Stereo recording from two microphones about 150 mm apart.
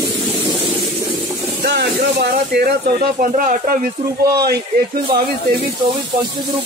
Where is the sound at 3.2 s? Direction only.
65° right (ahead or behind).